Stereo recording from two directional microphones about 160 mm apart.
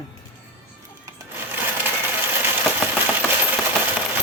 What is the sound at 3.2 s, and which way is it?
Coin, 10° right (ahead or behind).